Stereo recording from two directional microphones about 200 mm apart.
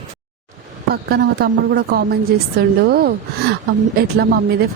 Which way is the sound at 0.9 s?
55° right (ahead or behind).